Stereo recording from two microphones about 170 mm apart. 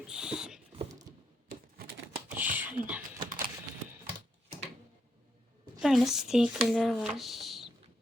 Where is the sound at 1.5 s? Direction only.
65° right (ahead or behind).